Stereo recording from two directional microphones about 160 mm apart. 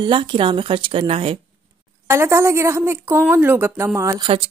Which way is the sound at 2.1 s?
15° right (ahead or behind).